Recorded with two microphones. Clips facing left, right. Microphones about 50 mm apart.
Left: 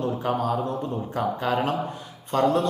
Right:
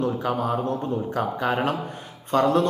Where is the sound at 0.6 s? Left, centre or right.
Right.